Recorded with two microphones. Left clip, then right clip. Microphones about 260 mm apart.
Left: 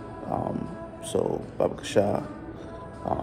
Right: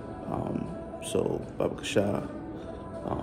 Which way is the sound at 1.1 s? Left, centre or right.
Centre.